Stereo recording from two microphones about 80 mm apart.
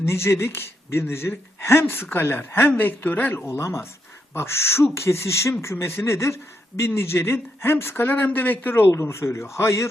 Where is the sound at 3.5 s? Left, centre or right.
Left.